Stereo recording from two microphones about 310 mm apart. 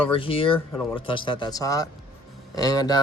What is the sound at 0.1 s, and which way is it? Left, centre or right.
Speech, centre.